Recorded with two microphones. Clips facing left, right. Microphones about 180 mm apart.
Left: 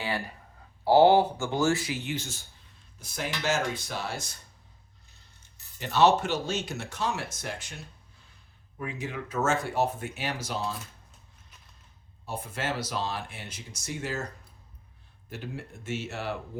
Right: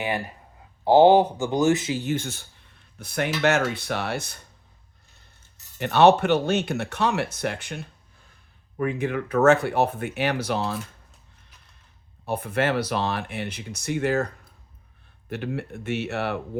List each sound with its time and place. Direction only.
0.9 s speech: 20° right (ahead or behind)
2.1 s speech: 60° right (ahead or behind)
5.8 s speech: 60° right (ahead or behind)
12.2 s speech: 60° right (ahead or behind)
15.3 s speech: 65° right (ahead or behind)